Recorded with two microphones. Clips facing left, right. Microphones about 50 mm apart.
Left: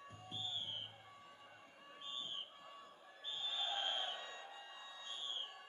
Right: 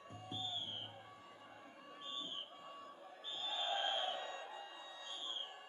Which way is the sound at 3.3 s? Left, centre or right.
Right.